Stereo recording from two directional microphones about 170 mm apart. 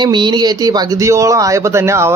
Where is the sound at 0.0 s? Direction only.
25° right (ahead or behind).